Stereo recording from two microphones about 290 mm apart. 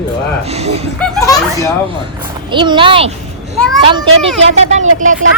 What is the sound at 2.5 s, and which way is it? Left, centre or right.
Speech, centre.